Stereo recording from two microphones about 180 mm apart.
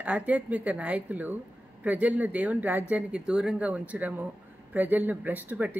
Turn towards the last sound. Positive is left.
turn(degrees=-10)  # may be behind; listen again after turning